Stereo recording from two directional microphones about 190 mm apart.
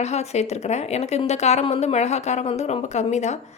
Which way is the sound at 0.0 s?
35° left (ahead or behind).